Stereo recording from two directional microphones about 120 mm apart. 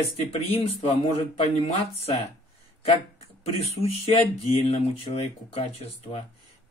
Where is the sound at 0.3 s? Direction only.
65° left (ahead or behind).